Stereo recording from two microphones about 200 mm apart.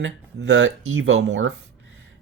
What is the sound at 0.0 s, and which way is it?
Speech, 65° right (ahead or behind).